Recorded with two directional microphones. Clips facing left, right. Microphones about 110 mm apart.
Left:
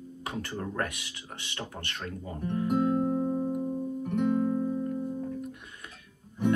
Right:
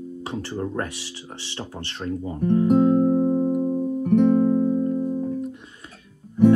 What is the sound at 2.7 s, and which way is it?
Music, 40° right (ahead or behind).